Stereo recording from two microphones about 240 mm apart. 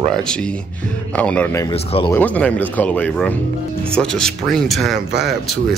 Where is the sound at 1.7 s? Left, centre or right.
Left.